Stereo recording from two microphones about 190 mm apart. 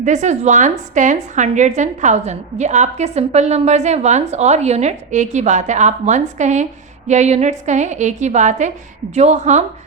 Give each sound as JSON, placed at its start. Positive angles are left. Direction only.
{"t": 0.0, "sound": "a woman's voice", "side_deg": -40}